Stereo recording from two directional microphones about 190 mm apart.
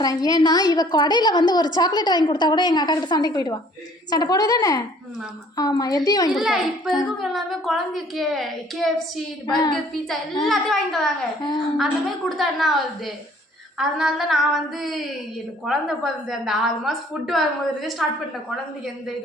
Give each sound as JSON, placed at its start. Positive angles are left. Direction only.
{"t": 0.0, "sound": "a woman's voice", "side_deg": 20}
{"t": 6.3, "sound": "a child's voice", "side_deg": 0}
{"t": 10.4, "sound": "a child's voice", "side_deg": 0}